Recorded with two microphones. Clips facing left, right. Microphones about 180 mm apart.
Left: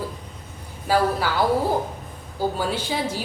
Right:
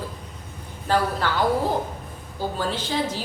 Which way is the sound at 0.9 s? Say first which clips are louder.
Left 2 dB; 5° left (ahead or behind).